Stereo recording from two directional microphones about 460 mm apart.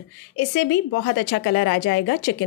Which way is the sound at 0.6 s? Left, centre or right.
Left.